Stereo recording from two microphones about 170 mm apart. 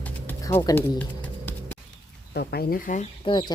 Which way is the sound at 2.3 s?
65° left (ahead or behind).